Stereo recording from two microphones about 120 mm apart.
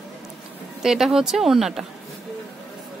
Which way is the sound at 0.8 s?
5° right (ahead or behind).